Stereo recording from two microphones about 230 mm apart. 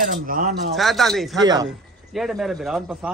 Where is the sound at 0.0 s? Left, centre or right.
Right.